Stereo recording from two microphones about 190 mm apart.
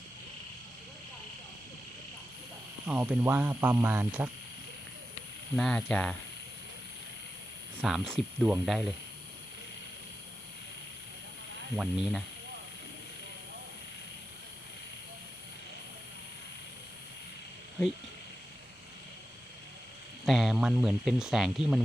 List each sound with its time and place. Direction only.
2.8 s speech: 5° right (ahead or behind)
5.5 s speech: 5° left (ahead or behind)
7.8 s speech: centre (ahead or behind)
11.8 s speech: centre (ahead or behind)
20.2 s speech: centre (ahead or behind)